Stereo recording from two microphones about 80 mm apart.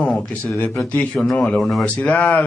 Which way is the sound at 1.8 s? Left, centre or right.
Centre.